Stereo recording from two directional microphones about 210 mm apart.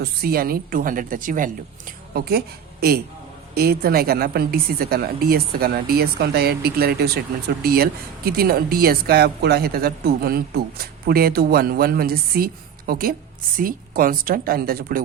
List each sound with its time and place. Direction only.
0.0 s a woman's voice: 45° right (ahead or behind)
3.5 s a woman's voice: 45° right (ahead or behind)